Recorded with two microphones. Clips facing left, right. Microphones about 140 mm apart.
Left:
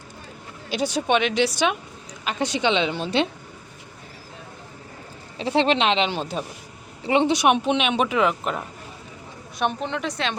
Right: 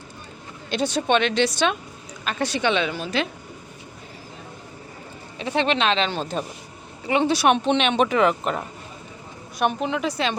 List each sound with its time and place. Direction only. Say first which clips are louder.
0.7 s a woman's voice: right 1 dB; 10° left (ahead or behind); by 3.2 s 30° left (ahead or behind)
5.4 s a woman's voice: left 2 dB; 30° left (ahead or behind)
7.0 s speech: left 1 dB; 25° left (ahead or behind); by 10.3 s 5° right (ahead or behind)